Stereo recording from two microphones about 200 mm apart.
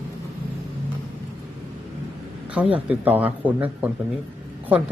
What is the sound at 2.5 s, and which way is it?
A man's voice, 5° right (ahead or behind).